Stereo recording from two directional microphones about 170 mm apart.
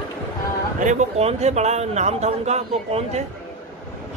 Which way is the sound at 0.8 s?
45° right (ahead or behind).